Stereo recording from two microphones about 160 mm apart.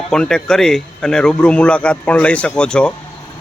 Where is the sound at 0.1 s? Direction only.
5° left (ahead or behind).